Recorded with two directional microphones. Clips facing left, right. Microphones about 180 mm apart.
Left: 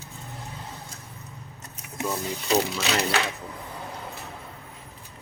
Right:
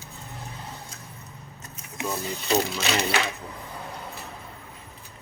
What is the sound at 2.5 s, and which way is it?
Speech, 5° left (ahead or behind).